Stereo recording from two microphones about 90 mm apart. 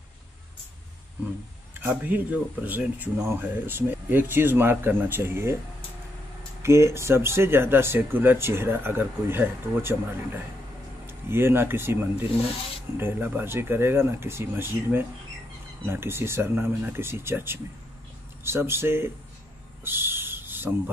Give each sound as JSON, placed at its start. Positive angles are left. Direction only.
{"t": 1.8, "sound": "speech", "side_deg": -20}
{"t": 6.6, "sound": "speech", "side_deg": -30}
{"t": 19.8, "sound": "owl", "side_deg": -25}